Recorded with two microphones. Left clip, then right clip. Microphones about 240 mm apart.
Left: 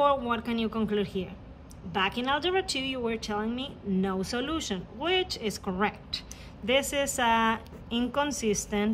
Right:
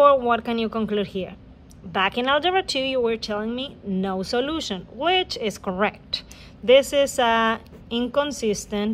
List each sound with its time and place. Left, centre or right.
0.0 s speech: centre